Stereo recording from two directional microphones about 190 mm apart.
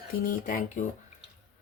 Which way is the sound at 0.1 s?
50° left (ahead or behind).